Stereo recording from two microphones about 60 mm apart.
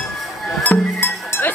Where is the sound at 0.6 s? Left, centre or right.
Left.